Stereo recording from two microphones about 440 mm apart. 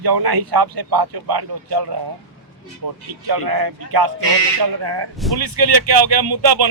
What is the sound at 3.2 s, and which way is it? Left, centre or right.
Speech, right.